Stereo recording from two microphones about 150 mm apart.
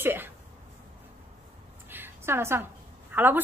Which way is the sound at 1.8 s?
15° right (ahead or behind).